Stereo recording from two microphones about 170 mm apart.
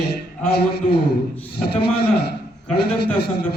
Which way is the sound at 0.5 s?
70° left (ahead or behind).